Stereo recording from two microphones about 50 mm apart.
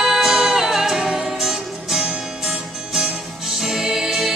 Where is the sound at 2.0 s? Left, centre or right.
Centre.